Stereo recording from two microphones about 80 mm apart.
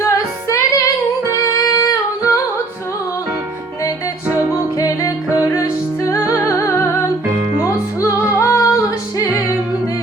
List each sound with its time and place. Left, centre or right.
0.0 s music: left
1.5 s singing: left
4.8 s music: left